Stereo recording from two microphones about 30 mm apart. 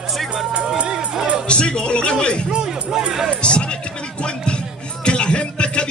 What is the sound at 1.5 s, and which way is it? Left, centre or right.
Speech, left.